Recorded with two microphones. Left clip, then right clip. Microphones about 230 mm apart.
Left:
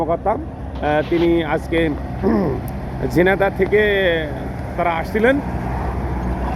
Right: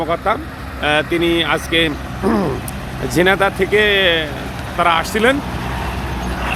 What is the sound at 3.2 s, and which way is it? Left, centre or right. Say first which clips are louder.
Speech: right 2 dB; centre.